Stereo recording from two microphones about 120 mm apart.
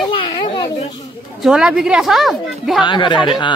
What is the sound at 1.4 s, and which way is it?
A woman's voice, 5° right (ahead or behind).